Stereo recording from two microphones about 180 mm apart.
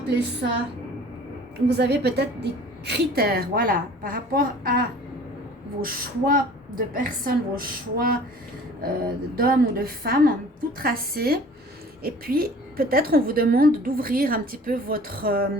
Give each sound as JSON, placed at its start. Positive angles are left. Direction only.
{"t": 1.6, "sound": "a woman's voice", "side_deg": -70}